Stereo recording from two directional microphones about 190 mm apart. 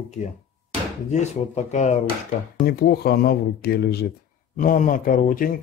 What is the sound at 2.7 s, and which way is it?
Speech, 55° left (ahead or behind).